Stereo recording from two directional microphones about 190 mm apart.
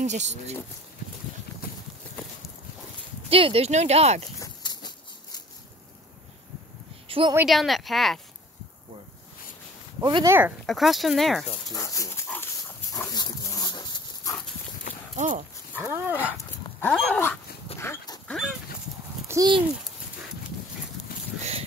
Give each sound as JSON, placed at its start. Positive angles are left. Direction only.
{"t": 0.0, "sound": "speech", "side_deg": -35}
{"t": 3.3, "sound": "speech", "side_deg": -30}
{"t": 4.6, "sound": "a sound", "side_deg": 25}
{"t": 7.1, "sound": "a sound", "side_deg": -30}
{"t": 7.3, "sound": "speech", "side_deg": 0}
{"t": 9.9, "sound": "speech", "side_deg": -20}
{"t": 10.7, "sound": "speech", "side_deg": 0}
{"t": 11.7, "sound": "speech", "side_deg": 15}
{"t": 12.9, "sound": "dog", "side_deg": 20}
{"t": 15.1, "sound": "speech", "side_deg": -40}
{"t": 15.8, "sound": "speech", "side_deg": -10}
{"t": 16.8, "sound": "dog", "side_deg": 5}
{"t": 18.3, "sound": "dog", "side_deg": 0}
{"t": 19.2, "sound": "speech", "side_deg": -20}